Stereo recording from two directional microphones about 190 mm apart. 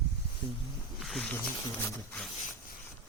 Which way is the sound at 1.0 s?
Centre (ahead or behind).